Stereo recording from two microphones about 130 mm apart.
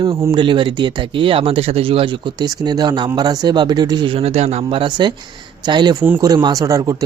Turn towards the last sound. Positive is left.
turn(degrees=-25)  # may be behind; listen again after turning